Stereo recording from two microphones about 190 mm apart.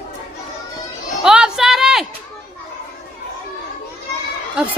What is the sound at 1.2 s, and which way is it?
Music, 5° right (ahead or behind).